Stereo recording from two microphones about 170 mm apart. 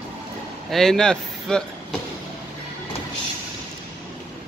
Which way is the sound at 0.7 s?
5° left (ahead or behind).